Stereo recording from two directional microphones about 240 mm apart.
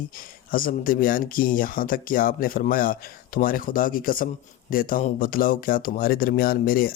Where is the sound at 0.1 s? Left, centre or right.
Left.